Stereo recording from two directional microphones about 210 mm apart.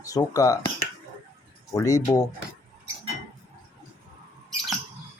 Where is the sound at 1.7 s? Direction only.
15° left (ahead or behind).